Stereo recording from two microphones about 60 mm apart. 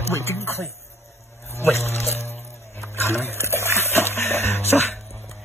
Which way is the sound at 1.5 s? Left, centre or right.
Left.